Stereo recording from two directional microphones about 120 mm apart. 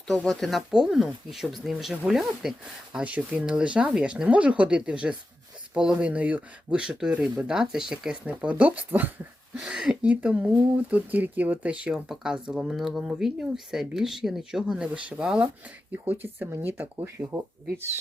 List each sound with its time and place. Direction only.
0.1 s speech: centre (ahead or behind); by 17.8 s 20° right (ahead or behind)